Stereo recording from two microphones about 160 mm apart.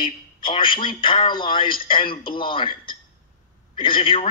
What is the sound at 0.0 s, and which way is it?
A man's voice, 30° left (ahead or behind).